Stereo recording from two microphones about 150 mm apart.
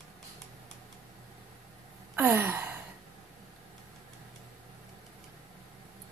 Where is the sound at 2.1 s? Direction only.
10° right (ahead or behind).